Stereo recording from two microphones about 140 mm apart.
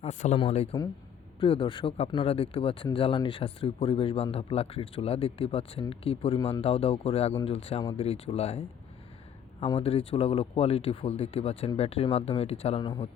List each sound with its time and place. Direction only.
0.0 s speech: 55° left (ahead or behind)
9.6 s speech: 40° left (ahead or behind)